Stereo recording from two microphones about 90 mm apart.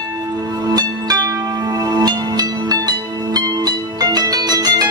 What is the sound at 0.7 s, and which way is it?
Music, 45° right (ahead or behind).